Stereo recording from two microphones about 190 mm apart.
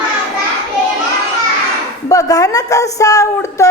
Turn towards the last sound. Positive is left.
turn(degrees=15)  # may be behind; listen again after turning